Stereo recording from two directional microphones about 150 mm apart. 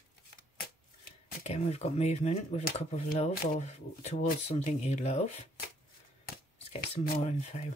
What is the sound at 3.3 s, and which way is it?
Speech, 80° left.